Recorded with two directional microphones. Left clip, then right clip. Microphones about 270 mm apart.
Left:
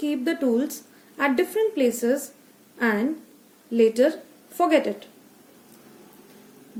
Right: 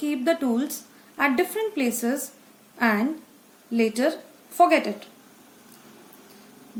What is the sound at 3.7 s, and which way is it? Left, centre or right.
A woman's voice, centre.